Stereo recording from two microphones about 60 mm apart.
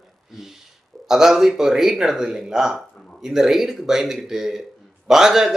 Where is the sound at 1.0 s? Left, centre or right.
Centre.